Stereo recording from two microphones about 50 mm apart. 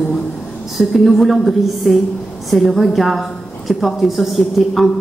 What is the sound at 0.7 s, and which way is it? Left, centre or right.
A woman's voice, centre.